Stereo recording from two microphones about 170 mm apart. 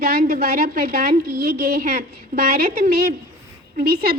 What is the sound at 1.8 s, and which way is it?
A woman's voice, 55° right (ahead or behind).